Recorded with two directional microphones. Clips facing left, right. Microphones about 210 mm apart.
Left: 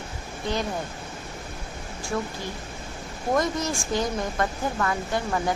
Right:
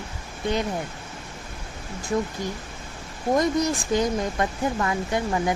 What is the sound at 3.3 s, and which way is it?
Speech, 20° right (ahead or behind).